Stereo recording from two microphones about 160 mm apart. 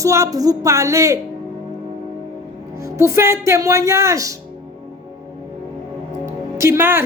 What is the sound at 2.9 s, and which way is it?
A woman's voice, 15° right (ahead or behind).